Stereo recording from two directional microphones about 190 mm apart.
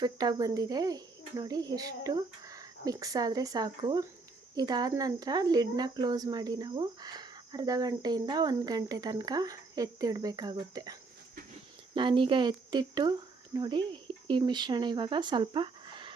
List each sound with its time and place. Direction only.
0.0 s speech: 20° right (ahead or behind)
11.9 s speech: 25° right (ahead or behind)